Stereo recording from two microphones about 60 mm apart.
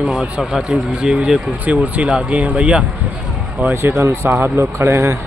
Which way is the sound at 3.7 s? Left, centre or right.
Right.